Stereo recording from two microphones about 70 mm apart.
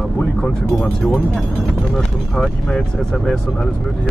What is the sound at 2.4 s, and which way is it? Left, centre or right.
Speech, centre.